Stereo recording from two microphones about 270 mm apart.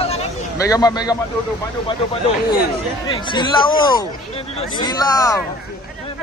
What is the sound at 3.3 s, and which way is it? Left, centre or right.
Speech, centre.